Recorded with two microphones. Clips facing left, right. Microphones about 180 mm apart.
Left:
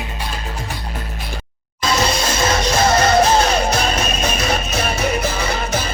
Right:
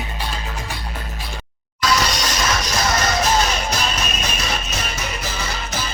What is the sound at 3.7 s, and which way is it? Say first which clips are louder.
Music: left 5 dB; 55° left (ahead or behind).